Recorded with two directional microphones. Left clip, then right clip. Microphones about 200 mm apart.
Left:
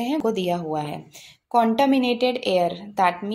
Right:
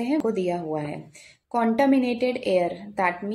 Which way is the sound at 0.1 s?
20° left (ahead or behind).